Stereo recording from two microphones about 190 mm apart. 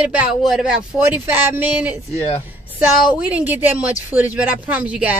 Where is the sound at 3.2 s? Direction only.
10° right (ahead or behind).